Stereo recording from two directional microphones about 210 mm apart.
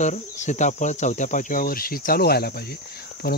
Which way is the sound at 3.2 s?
50° left (ahead or behind).